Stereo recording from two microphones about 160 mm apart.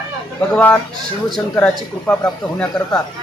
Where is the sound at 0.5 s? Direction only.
10° left (ahead or behind).